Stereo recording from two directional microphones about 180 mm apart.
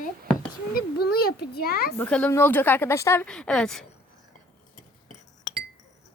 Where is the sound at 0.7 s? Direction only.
60° left (ahead or behind).